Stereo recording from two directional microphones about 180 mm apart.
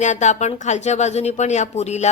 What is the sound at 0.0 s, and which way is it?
Speech, 40° left (ahead or behind).